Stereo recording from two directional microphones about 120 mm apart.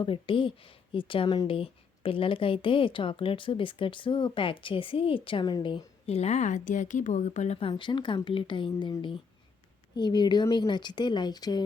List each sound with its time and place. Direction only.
0.0 s speech: 45° left (ahead or behind)
6.1 s a woman's voice: 65° left (ahead or behind)
7.6 s speech: 40° left (ahead or behind)